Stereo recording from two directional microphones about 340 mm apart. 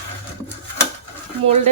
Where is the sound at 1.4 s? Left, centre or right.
Centre.